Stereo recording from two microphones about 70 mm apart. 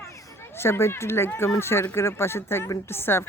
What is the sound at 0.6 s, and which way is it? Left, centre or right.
A woman's voice, left.